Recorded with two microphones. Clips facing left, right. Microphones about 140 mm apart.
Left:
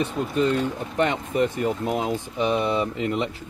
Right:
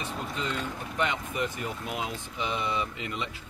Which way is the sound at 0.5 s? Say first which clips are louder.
Left 10 dB; 35° left (ahead or behind).